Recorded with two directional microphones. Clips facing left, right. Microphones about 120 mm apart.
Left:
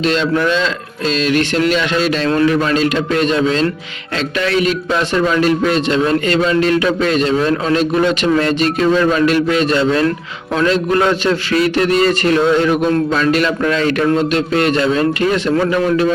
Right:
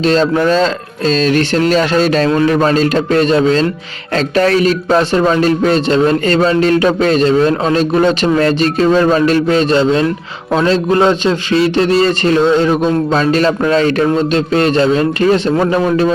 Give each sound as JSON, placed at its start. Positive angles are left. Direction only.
{"t": 0.0, "sound": "a man's voice", "side_deg": -35}